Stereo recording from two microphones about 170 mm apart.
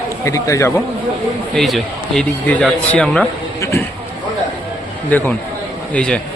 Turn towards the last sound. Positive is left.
turn(degrees=5)  # may be behind; listen again after turning